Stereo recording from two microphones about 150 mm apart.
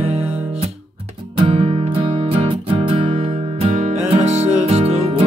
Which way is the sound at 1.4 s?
45° right (ahead or behind).